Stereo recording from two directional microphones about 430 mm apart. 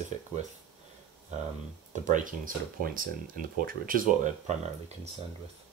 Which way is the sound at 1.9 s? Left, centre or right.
Centre.